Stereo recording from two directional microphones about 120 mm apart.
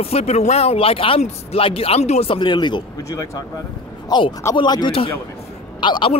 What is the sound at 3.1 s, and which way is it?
Speech, 30° left (ahead or behind).